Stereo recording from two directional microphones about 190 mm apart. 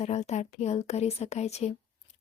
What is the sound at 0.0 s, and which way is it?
Speech, 35° left (ahead or behind).